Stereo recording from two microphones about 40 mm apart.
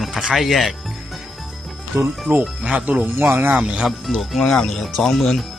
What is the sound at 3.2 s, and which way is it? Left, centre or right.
Speech, right.